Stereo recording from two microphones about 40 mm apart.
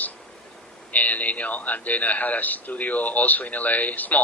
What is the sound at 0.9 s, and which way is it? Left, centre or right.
A man's voice, left.